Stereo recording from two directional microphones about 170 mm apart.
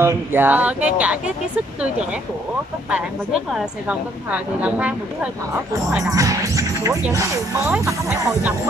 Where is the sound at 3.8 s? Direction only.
10° right (ahead or behind).